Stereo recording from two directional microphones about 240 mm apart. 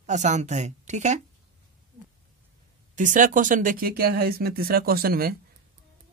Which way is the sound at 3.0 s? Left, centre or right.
Right.